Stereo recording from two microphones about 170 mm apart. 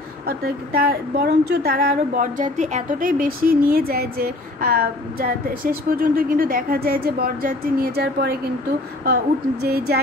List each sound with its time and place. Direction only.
0.3 s a woman's voice: 60° right (ahead or behind)